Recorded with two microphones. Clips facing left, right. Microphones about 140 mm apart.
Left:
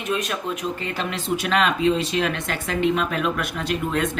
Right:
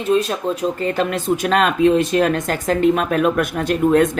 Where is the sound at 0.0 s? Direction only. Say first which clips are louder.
Right 8 dB; 30° right (ahead or behind).